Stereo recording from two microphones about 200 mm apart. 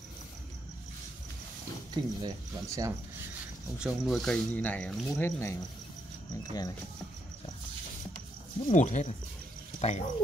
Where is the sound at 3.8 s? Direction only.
Centre (ahead or behind).